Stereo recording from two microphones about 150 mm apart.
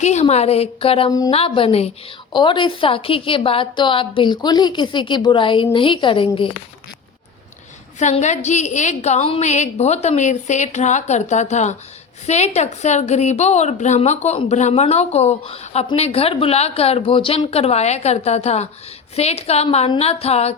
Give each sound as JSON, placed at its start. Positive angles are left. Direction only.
{"t": 0.0, "sound": "a woman's voice", "side_deg": 50}
{"t": 7.9, "sound": "a woman's voice", "side_deg": 50}